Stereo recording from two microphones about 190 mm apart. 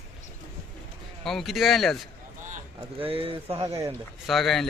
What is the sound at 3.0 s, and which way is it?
Speech, 30° right (ahead or behind).